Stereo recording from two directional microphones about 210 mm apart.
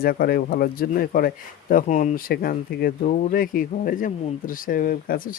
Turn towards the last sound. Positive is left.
turn(degrees=40)  # may be behind; listen again after turning